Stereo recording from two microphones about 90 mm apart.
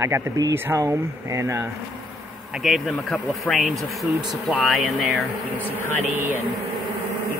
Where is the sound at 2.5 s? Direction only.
Centre (ahead or behind).